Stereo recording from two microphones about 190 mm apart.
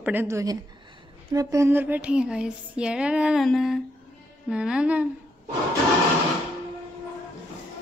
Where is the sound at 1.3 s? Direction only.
15° right (ahead or behind).